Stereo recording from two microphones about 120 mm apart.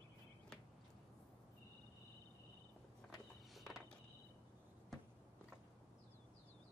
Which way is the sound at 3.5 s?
Centre (ahead or behind).